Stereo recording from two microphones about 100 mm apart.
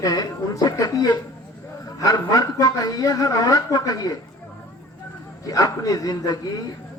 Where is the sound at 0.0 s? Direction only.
35° left (ahead or behind).